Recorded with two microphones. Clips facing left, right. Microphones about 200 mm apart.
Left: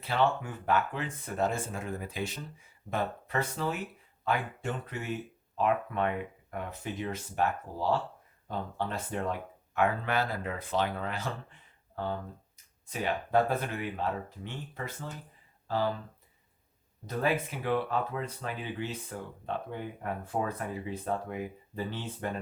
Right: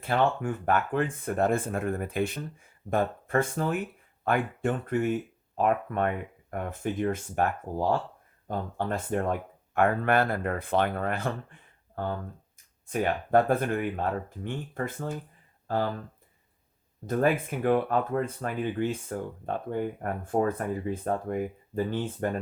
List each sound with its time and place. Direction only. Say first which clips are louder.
0.0 s speech: right 3 dB; 50° right (ahead or behind)
12.9 s speech: right 5 dB; 50° right (ahead or behind)
17.1 s speech: right 5 dB; 50° right (ahead or behind)